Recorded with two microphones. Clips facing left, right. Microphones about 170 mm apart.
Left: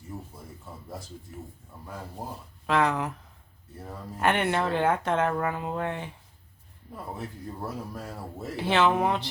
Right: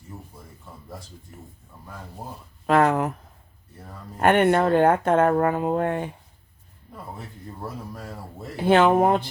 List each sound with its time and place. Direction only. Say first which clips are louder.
2.6 s speech: right 6 dB; 50° right (ahead or behind)
4.2 s speech: right 7 dB; 50° right (ahead or behind)
8.5 s speech: right 6 dB; 50° right (ahead or behind)